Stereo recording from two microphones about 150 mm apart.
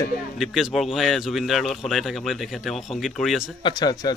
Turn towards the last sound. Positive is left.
turn(degrees=25)  # may be behind; listen again after turning